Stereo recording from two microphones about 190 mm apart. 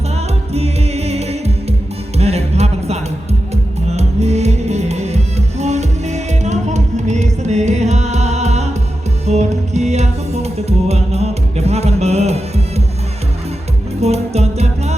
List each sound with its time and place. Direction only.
0.5 s music: 35° right (ahead or behind)
14.0 s music: 35° right (ahead or behind)